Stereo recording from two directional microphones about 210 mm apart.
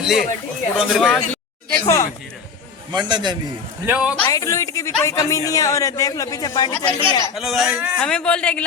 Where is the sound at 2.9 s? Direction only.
20° right (ahead or behind).